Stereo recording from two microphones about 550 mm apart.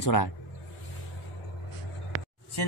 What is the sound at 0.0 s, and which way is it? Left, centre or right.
Speech, left.